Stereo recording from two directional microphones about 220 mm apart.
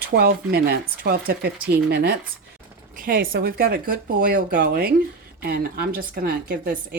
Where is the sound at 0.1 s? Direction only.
50° right (ahead or behind).